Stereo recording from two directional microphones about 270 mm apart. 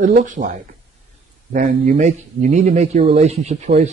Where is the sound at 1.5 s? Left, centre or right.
Right.